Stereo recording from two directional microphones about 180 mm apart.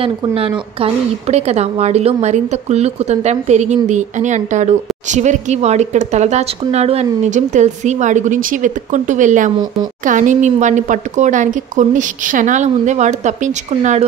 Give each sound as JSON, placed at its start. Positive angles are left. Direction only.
{"t": 0.0, "sound": "a woman's voice", "side_deg": -30}